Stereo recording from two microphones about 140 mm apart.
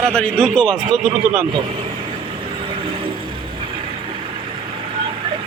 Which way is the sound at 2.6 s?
40° right (ahead or behind).